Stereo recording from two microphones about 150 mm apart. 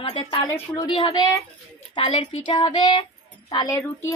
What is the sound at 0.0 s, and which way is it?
Speech, 40° left (ahead or behind).